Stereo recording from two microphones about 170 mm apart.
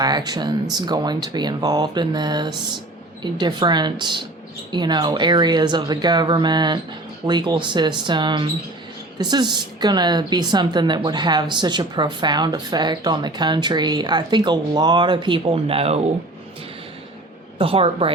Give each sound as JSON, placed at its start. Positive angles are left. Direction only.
{"t": 0.0, "sound": "speech", "side_deg": -25}
{"t": 17.6, "sound": "a woman's voice", "side_deg": -35}